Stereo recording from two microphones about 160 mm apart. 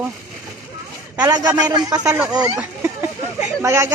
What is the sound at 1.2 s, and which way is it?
Speech, 25° right (ahead or behind).